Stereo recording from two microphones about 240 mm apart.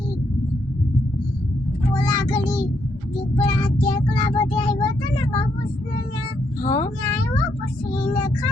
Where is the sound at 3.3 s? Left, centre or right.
Left.